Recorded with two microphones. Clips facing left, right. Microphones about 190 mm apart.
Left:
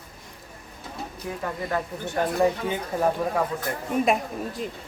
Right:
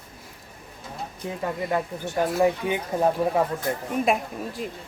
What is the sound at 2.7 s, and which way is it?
Speech, 20° right (ahead or behind).